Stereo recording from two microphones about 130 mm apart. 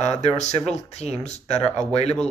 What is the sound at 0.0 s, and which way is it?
Speech, 60° left (ahead or behind).